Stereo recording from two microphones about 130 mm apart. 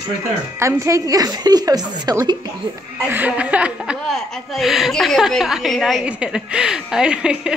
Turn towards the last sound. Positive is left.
turn(degrees=-5)  # may be behind; listen again after turning